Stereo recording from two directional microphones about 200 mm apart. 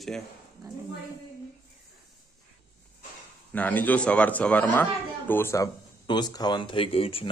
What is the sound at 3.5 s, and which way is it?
A man's voice, 10° left (ahead or behind).